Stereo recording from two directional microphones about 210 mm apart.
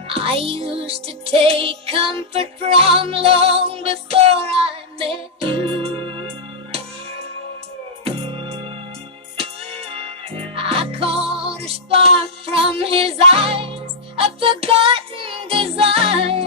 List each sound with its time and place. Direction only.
0.1 s music: 25° right (ahead or behind)
8.0 s music: 25° right (ahead or behind)